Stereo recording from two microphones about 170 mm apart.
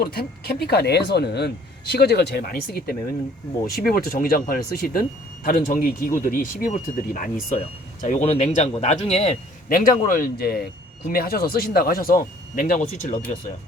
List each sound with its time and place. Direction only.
0.0 s speech: 65° left (ahead or behind); by 9.4 s 40° left (ahead or behind)
9.6 s speech: 55° left (ahead or behind)